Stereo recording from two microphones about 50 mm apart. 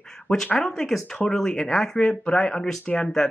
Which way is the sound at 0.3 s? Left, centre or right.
Left.